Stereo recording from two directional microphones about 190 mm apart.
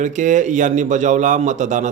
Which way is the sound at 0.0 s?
40° right (ahead or behind).